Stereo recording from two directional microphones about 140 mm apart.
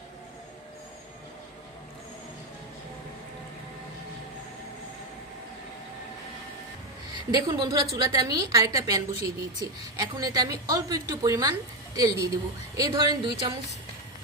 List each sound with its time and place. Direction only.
7.1 s a woman's voice: 25° right (ahead or behind)